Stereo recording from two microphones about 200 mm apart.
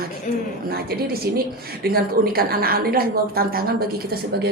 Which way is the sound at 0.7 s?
50° right (ahead or behind).